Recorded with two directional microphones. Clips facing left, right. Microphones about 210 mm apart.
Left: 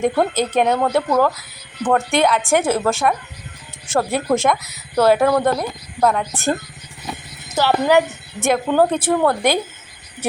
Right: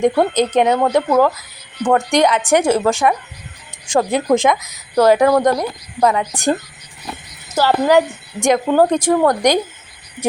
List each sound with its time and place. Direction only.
0.0 s a woman's voice: 15° right (ahead or behind)
7.1 s a sound: 5° right (ahead or behind)
7.9 s a woman's voice: 15° right (ahead or behind)